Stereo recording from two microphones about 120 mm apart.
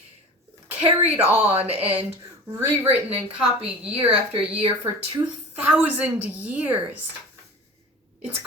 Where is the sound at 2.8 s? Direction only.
50° right (ahead or behind).